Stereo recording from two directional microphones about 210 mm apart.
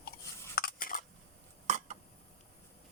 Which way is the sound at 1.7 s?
35° right (ahead or behind).